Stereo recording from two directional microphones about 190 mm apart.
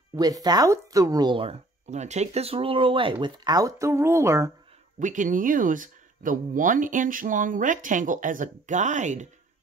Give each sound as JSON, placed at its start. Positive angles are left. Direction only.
{"t": 0.1, "sound": "speech", "side_deg": -20}
{"t": 4.9, "sound": "speech", "side_deg": -40}